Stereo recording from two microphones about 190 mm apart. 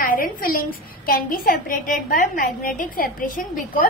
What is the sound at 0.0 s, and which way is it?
A woman's voice, 50° left (ahead or behind).